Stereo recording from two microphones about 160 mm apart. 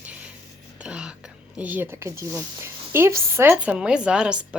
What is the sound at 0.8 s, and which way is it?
Speech, 5° right (ahead or behind).